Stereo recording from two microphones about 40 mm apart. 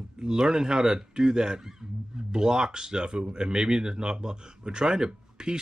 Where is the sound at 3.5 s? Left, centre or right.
Centre.